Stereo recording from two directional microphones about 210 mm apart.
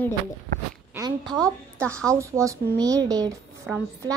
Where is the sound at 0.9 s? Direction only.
15° right (ahead or behind).